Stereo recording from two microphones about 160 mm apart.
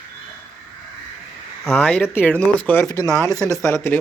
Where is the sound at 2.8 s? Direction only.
20° left (ahead or behind).